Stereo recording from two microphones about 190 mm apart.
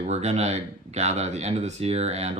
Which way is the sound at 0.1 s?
35° right (ahead or behind).